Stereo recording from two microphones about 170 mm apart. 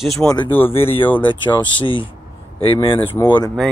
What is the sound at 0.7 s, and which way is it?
Speech, 35° left (ahead or behind).